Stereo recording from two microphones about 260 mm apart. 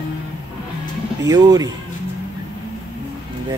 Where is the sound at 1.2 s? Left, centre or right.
Centre.